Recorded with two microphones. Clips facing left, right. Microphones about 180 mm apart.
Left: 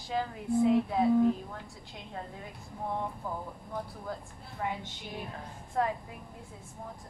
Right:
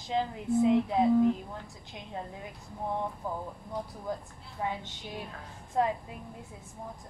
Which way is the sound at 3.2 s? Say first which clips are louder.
Right 2 dB; 15° right (ahead or behind).